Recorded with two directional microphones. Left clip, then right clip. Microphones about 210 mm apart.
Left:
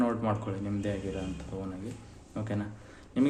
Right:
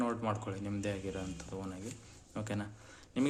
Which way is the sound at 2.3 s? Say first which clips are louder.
Left 4 dB; 15° right (ahead or behind).